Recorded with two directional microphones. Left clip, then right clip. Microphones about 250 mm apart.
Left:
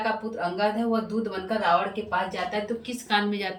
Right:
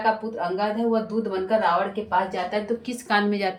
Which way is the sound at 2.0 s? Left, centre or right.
Centre.